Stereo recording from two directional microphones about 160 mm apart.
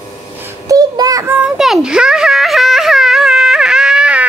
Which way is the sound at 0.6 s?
25° right (ahead or behind).